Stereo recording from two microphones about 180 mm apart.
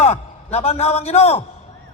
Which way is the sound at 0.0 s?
35° left (ahead or behind).